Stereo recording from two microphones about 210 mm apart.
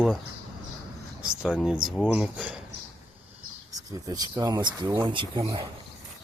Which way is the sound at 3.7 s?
15° right (ahead or behind).